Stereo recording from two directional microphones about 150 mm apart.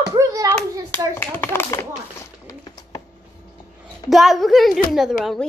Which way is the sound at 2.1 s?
25° left (ahead or behind).